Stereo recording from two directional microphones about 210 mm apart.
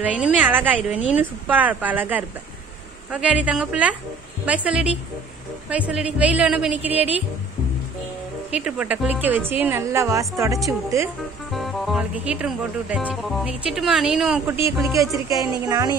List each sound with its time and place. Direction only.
0.0 s a woman's voice: 5° right (ahead or behind)
8.5 s a woman's voice: 5° right (ahead or behind)
11.5 s a woman's voice: centre (ahead or behind); by 15.9 s 15° right (ahead or behind)